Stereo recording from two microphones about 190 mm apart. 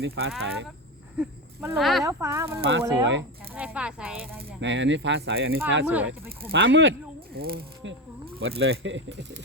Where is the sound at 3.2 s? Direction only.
10° right (ahead or behind).